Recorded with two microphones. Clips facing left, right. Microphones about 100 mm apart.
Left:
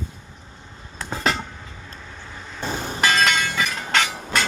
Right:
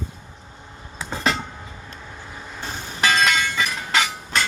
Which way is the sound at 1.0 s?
Centre (ahead or behind).